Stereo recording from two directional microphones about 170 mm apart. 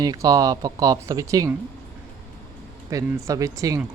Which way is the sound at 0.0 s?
20° right (ahead or behind).